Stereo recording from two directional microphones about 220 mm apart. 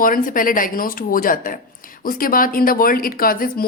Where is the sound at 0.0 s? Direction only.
40° left (ahead or behind).